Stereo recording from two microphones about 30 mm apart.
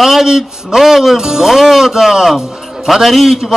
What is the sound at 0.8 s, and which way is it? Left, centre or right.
A man's voice, centre.